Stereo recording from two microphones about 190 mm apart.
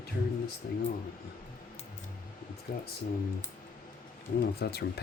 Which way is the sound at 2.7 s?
60° left (ahead or behind).